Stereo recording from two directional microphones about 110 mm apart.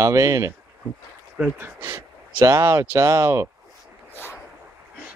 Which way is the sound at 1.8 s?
25° right (ahead or behind).